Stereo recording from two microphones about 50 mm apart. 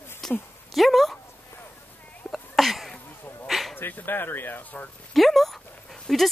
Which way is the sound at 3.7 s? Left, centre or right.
Left.